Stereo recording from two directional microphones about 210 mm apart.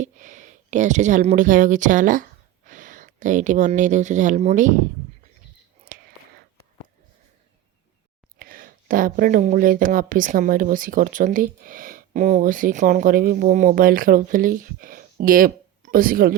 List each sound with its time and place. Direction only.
0.0 s speech: 35° right (ahead or behind)
5.9 s whispering: 40° right (ahead or behind)
8.4 s speech: 40° right (ahead or behind)